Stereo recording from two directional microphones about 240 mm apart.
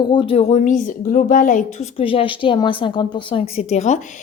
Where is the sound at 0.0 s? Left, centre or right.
Centre.